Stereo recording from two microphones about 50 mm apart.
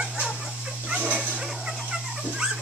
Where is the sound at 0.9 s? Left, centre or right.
Right.